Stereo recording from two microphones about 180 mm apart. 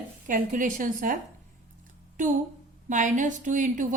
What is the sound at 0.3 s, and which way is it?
Speech, 45° right (ahead or behind).